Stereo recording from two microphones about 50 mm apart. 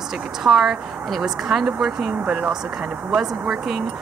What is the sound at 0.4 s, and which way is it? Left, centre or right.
A woman's voice, centre.